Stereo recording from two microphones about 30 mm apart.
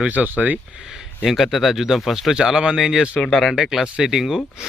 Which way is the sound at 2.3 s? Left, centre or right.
Right.